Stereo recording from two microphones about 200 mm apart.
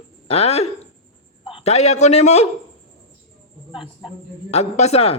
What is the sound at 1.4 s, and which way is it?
A man's voice, 30° left (ahead or behind).